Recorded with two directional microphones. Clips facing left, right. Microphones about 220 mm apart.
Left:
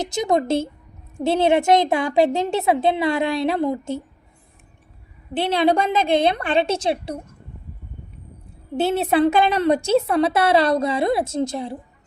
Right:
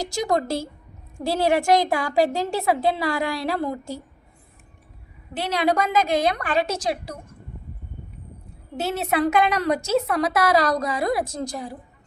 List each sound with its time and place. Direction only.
0.0 s a woman's voice: 20° left (ahead or behind)
5.3 s a woman's voice: 30° left (ahead or behind)
8.7 s a woman's voice: 30° left (ahead or behind)